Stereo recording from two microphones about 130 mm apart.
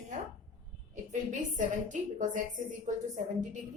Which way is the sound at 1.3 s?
75° right (ahead or behind).